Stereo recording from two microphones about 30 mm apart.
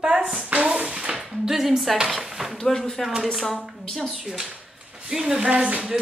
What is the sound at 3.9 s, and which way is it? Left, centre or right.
Speech, centre.